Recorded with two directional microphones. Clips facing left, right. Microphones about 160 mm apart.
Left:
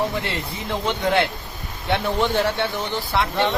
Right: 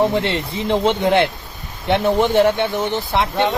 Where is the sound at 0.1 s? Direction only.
25° right (ahead or behind).